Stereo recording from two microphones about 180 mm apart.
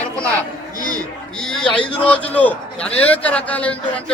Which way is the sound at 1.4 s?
5° left (ahead or behind).